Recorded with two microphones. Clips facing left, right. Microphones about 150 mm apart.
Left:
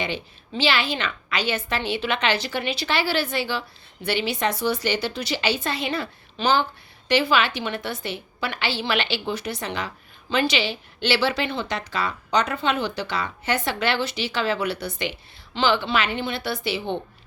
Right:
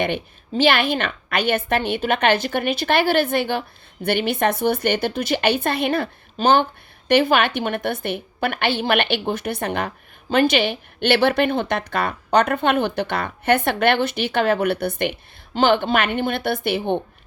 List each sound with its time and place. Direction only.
0.0 s a woman's voice: 55° right (ahead or behind)